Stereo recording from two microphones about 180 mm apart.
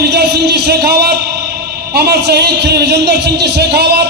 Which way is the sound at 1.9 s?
60° right (ahead or behind).